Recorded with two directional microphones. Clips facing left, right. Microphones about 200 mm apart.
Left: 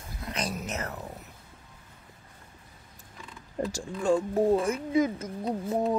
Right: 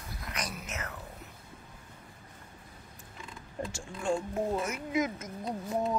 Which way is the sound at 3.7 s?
35° left (ahead or behind).